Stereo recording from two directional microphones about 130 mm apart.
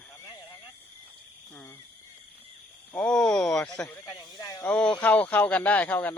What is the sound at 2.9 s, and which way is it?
Speech, 5° left (ahead or behind).